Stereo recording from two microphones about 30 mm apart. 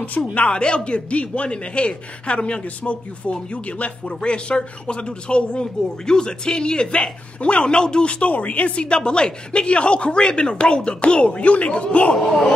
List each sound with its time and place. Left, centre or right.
0.2 s speech: left
0.5 s speech: left
4.2 s speech: left
6.0 s speech: left
8.3 s speech: left
8.8 s speech: left